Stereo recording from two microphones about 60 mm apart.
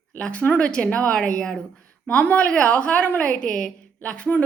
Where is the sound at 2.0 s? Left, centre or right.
Left.